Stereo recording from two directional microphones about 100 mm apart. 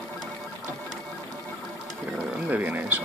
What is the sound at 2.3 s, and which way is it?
Speech, 15° right (ahead or behind).